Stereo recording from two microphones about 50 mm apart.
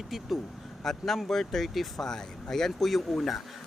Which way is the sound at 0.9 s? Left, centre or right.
Centre.